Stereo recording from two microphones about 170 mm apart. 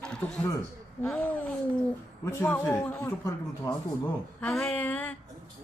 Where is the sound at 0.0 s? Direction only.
5° left (ahead or behind).